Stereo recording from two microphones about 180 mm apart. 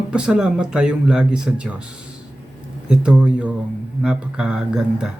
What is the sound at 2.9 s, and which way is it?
Speech, 5° right (ahead or behind).